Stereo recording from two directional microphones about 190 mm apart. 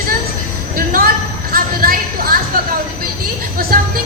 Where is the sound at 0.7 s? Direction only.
50° right (ahead or behind).